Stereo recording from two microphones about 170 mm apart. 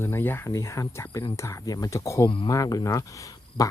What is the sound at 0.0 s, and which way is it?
Speech, 15° left (ahead or behind).